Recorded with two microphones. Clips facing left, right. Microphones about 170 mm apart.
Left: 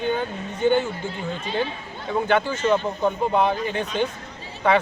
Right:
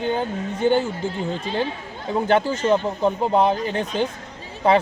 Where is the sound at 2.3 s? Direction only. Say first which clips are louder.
Right 2 dB; 35° right (ahead or behind).